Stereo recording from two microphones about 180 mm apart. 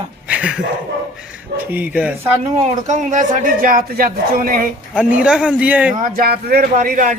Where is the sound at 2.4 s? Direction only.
40° right (ahead or behind).